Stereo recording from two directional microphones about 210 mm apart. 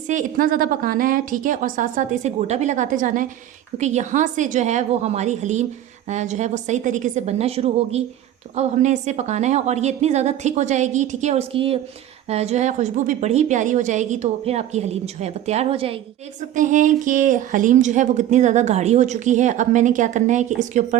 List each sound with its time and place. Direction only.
0.1 s a woman's voice: 40° right (ahead or behind)